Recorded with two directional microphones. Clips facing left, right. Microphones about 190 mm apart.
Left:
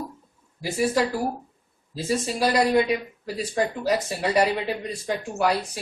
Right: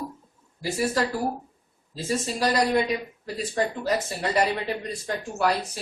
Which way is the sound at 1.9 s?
10° left (ahead or behind).